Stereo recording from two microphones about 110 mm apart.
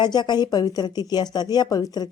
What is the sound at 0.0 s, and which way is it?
Speech, 40° left (ahead or behind).